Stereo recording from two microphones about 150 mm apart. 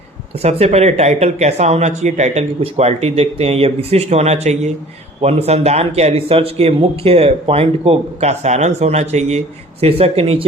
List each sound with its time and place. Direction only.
0.3 s speech: 45° right (ahead or behind)